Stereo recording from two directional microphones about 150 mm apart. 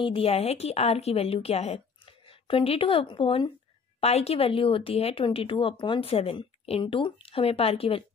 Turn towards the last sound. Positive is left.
turn(degrees=40)  # may be behind; listen again after turning